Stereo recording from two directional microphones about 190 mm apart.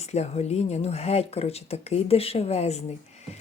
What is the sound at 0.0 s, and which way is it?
Speech, 35° left (ahead or behind).